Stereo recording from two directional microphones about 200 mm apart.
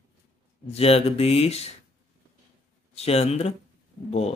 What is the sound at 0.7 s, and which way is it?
Speech, 30° left (ahead or behind).